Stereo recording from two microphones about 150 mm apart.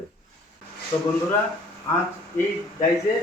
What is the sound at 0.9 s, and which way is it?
Speech, 25° left (ahead or behind).